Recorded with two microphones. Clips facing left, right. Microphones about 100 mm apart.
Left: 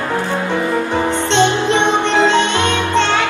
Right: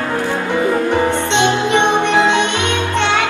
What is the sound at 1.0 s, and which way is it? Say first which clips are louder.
Music: left 1 dB; 15° right (ahead or behind).